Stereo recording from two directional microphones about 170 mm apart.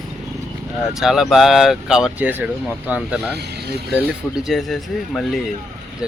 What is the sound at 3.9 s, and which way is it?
Speech, centre (ahead or behind).